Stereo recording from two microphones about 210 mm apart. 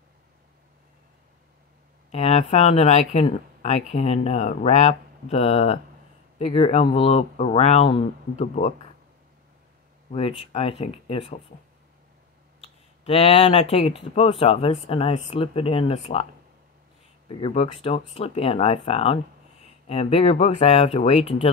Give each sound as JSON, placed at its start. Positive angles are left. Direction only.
{"t": 2.0, "sound": "speech", "side_deg": 30}
{"t": 10.1, "sound": "speech", "side_deg": 30}
{"t": 13.0, "sound": "speech", "side_deg": 25}
{"t": 17.3, "sound": "speech", "side_deg": 25}